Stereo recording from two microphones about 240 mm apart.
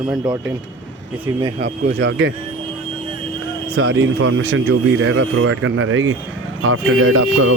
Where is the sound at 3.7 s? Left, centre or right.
Right.